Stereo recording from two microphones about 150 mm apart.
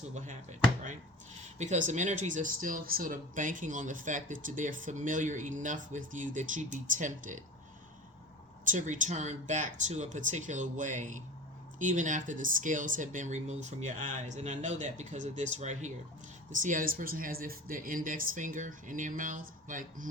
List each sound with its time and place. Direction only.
0.1 s speech: 55° right (ahead or behind)
1.5 s speech: 50° right (ahead or behind)
8.6 s speech: 60° right (ahead or behind)